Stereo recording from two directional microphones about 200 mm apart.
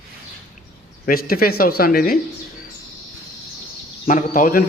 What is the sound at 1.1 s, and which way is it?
A man's voice, 50° left (ahead or behind).